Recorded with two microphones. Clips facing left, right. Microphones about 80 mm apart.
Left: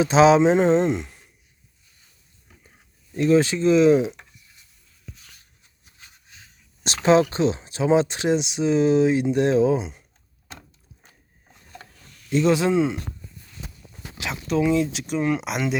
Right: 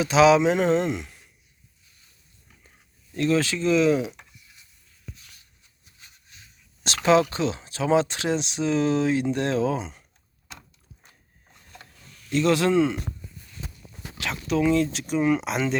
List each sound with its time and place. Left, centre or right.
0.0 s speech: left
3.2 s speech: centre
6.8 s speech: left
12.3 s speech: centre
14.4 s speech: centre